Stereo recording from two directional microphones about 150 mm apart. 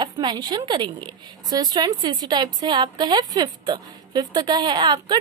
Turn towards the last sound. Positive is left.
turn(degrees=-30)  # may be behind; listen again after turning